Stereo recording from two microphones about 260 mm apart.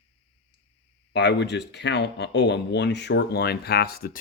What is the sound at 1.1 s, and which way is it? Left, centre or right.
Speech, left.